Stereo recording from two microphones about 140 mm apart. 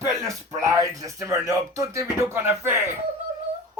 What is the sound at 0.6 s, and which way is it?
Speech, 25° right (ahead or behind).